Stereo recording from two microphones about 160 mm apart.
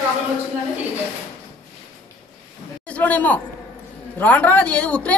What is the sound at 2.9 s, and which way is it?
A woman's voice, 10° left (ahead or behind).